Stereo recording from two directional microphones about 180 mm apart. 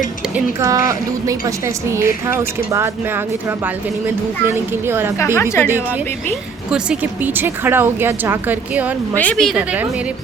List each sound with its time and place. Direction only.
0.3 s a woman's voice: 15° right (ahead or behind)
5.1 s a woman's voice: 15° left (ahead or behind)
5.6 s a woman's voice: 10° right (ahead or behind)
9.1 s a woman's voice: 5° left (ahead or behind)